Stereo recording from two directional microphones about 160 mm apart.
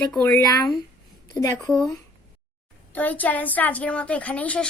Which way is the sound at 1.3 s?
20° left (ahead or behind).